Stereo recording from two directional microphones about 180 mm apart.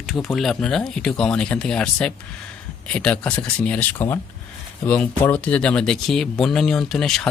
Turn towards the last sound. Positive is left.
turn(degrees=0)  # may be behind; listen again after turning